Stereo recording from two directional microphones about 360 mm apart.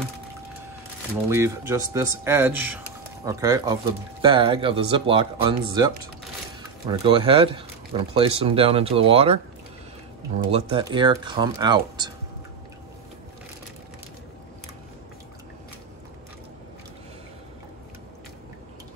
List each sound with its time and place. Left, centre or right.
1.3 s speech: centre
10.5 s speech: centre